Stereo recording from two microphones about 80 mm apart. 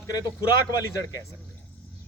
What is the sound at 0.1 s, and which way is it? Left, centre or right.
Speech, left.